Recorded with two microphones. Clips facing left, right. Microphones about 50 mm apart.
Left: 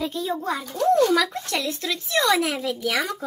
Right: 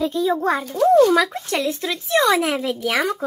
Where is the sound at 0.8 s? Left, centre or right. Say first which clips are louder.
Right 5 dB; centre.